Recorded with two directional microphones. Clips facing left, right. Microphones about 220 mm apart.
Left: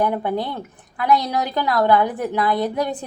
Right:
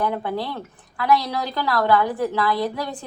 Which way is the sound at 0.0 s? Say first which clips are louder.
Left 3 dB; 20° left (ahead or behind).